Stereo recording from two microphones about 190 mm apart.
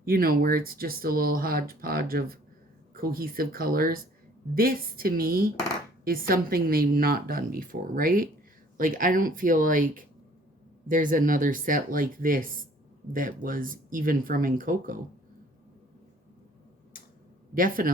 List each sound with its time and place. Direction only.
0.0 s speech: 50° right (ahead or behind)
17.5 s speech: 45° right (ahead or behind)